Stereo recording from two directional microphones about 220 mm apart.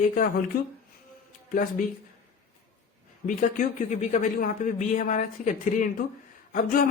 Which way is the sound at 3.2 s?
35° left (ahead or behind).